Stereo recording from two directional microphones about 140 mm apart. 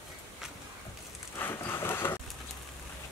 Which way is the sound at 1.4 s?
15° left (ahead or behind).